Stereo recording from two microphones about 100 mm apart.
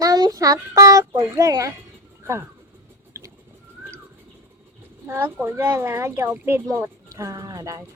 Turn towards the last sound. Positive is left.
turn(degrees=-30)  # may be behind; listen again after turning